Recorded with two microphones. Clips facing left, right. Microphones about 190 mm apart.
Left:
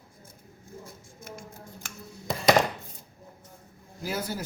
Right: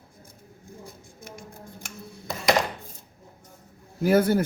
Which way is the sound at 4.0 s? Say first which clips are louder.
Right 13 dB; 55° right (ahead or behind).